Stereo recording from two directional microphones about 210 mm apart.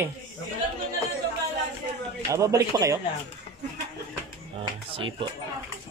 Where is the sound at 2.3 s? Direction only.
15° right (ahead or behind).